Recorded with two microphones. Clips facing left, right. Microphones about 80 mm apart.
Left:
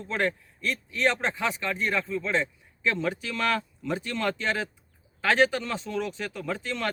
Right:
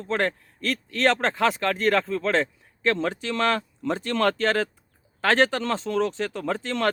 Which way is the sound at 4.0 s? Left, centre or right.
Right.